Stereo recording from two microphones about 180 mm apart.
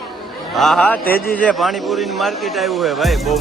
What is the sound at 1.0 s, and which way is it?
Speech, 55° left (ahead or behind).